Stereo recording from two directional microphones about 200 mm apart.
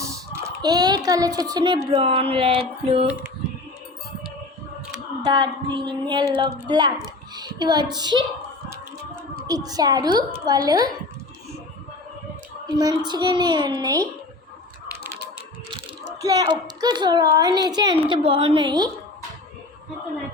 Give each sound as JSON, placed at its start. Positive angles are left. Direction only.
{"t": 0.6, "sound": "a child's voice", "side_deg": -20}
{"t": 5.2, "sound": "a child's voice", "side_deg": -20}
{"t": 7.3, "sound": "child singing", "side_deg": -20}
{"t": 7.9, "sound": "a child's voice", "side_deg": -20}
{"t": 9.5, "sound": "a child's voice", "side_deg": -20}
{"t": 12.6, "sound": "a child's voice", "side_deg": -20}
{"t": 16.0, "sound": "a child's voice", "side_deg": -15}